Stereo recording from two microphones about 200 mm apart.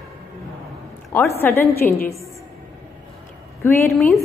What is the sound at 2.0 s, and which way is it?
Speech, 15° left (ahead or behind).